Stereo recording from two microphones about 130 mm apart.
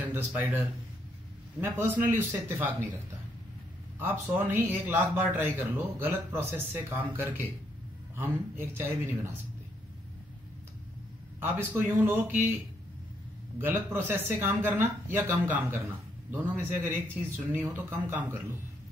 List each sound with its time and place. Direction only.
0.0 s speech: 15° right (ahead or behind)
1.6 s speech: 15° right (ahead or behind)
4.0 s speech: 15° right (ahead or behind)
11.3 s speech: 15° right (ahead or behind)
13.6 s speech: 15° right (ahead or behind)
16.9 s speech: 15° right (ahead or behind)